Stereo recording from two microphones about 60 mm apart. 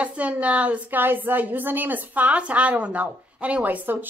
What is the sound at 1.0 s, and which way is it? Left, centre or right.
A woman's voice, right.